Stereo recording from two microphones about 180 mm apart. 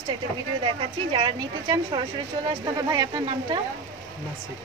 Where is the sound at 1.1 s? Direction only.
30° right (ahead or behind).